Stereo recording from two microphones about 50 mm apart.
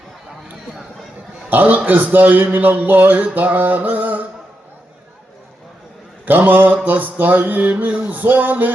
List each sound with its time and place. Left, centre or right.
1.5 s a man's voice: right
6.2 s a man's voice: right